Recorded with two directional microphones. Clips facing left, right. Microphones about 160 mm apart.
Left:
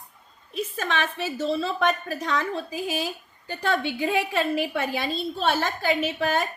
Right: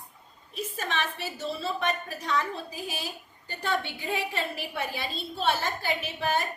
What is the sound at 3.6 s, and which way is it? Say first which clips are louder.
A woman's voice: left 6 dB; 90° left.